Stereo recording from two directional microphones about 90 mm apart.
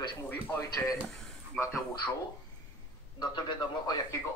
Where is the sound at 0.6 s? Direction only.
40° left (ahead or behind).